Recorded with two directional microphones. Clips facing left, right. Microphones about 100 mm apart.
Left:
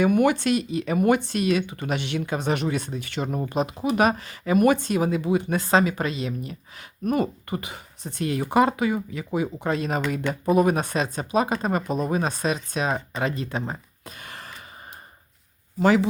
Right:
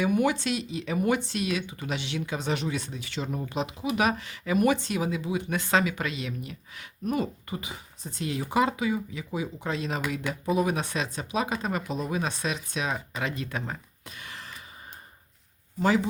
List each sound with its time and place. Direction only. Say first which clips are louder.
0.0 s speech: left 5 dB; 60° left (ahead or behind)
5.5 s speech: left 2 dB; 35° left (ahead or behind)
7.0 s speech: left 5 dB; 55° left (ahead or behind); by 13.7 s 30° left (ahead or behind)
14.2 s a sound: left 2 dB; 50° left (ahead or behind)
15.8 s speech: left 5 dB; 70° left (ahead or behind)